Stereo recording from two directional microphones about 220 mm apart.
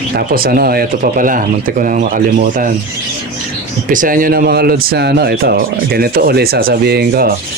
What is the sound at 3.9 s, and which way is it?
Speech, 40° right (ahead or behind).